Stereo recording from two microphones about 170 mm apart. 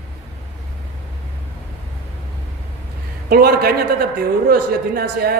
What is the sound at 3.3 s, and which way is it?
A man's voice, 65° right (ahead or behind).